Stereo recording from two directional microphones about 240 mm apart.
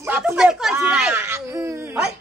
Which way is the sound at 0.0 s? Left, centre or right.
Centre.